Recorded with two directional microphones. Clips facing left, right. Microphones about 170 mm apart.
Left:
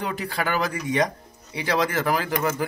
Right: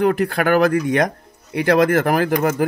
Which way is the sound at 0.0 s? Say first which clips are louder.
Right 10 dB; 60° right (ahead or behind).